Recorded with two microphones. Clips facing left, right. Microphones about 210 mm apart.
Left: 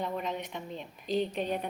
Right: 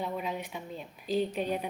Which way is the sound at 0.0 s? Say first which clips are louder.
Even; 5° right (ahead or behind).